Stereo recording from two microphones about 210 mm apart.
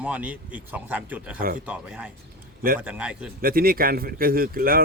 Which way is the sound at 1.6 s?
5° right (ahead or behind).